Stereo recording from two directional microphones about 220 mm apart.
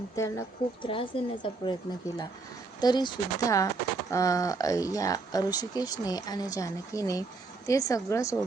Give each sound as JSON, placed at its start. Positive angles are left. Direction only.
{"t": 0.2, "sound": "speech", "side_deg": 15}
{"t": 0.9, "sound": "a woman's voice", "side_deg": 25}
{"t": 2.8, "sound": "speech", "side_deg": 20}